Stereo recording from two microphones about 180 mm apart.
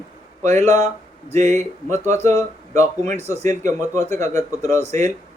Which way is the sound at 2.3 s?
15° left (ahead or behind).